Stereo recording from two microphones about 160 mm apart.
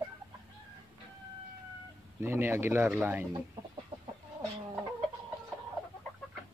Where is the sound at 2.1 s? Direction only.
15° right (ahead or behind).